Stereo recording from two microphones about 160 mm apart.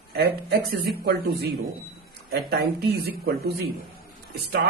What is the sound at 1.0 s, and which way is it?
Speech, 75° right (ahead or behind).